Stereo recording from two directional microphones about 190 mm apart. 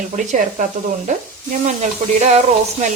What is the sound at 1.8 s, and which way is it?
Speech, 40° right (ahead or behind).